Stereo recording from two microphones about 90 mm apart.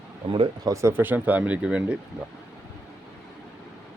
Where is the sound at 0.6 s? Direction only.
35° right (ahead or behind); by 2.0 s 10° right (ahead or behind).